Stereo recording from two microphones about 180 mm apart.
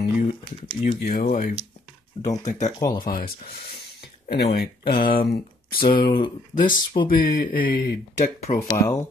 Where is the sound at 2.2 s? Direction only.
25° left (ahead or behind).